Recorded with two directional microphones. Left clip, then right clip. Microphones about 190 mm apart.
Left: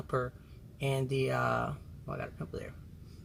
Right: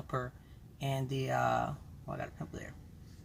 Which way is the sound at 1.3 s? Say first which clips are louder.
Right 4 dB; 15° left (ahead or behind).